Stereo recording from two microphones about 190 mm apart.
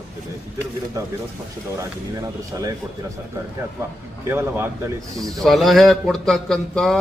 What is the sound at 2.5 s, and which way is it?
Speech, 15° right (ahead or behind).